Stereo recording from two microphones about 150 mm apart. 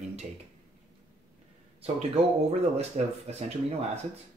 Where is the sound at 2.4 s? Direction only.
45° right (ahead or behind).